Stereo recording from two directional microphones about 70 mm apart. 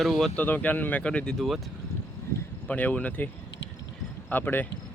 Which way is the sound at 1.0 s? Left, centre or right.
Centre.